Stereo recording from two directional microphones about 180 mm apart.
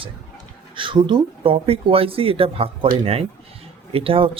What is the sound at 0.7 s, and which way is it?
Speech, 30° right (ahead or behind).